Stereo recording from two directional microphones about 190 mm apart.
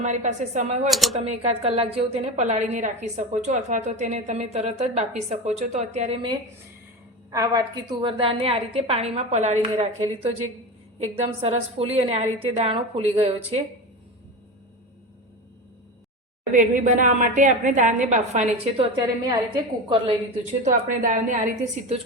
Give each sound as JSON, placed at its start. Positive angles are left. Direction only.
{"t": 0.0, "sound": "a woman's voice", "side_deg": -40}
{"t": 0.9, "sound": "speech", "side_deg": 0}
{"t": 1.1, "sound": "a woman's voice", "side_deg": -35}
{"t": 7.3, "sound": "a woman's voice", "side_deg": -20}
{"t": 16.5, "sound": "a woman's voice", "side_deg": -40}
{"t": 20.9, "sound": "a woman's voice", "side_deg": -45}